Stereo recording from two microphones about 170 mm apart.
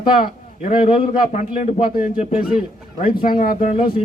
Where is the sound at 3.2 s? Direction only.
55° left (ahead or behind).